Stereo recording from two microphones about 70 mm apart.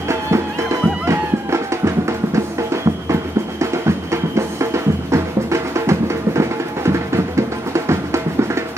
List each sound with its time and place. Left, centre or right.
0.1 s music: right